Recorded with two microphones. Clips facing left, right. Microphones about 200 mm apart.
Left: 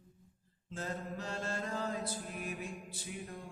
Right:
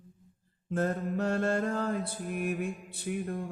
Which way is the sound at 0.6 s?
55° right (ahead or behind).